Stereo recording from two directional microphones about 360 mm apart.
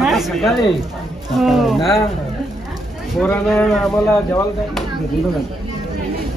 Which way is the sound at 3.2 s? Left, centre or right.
Centre.